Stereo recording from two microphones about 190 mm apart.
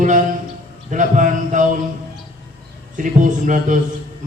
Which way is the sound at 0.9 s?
40° right (ahead or behind).